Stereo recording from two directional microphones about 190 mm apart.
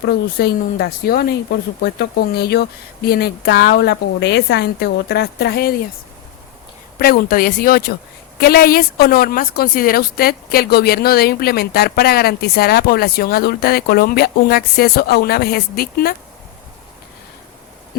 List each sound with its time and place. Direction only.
0.3 s a woman's voice: 55° left (ahead or behind)
7.0 s a woman's voice: 50° left (ahead or behind)